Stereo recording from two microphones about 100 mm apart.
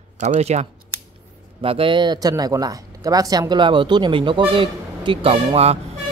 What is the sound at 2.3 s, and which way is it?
Speech, 35° right (ahead or behind).